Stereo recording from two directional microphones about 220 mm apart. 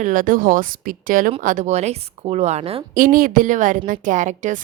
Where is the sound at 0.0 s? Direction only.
40° right (ahead or behind).